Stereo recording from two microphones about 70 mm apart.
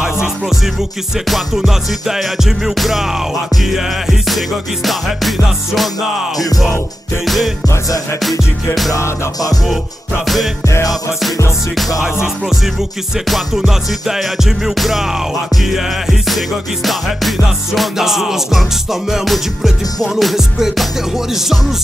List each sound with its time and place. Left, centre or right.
0.0 s music: centre
7.2 s music: centre
7.6 s music: left
8.2 s music: centre
8.9 s music: left
10.2 s music: centre
13.3 s music: centre